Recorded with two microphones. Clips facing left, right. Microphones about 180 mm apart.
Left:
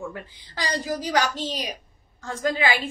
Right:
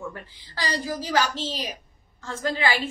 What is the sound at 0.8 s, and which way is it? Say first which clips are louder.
A woman's voice: left 1 dB; 15° left (ahead or behind).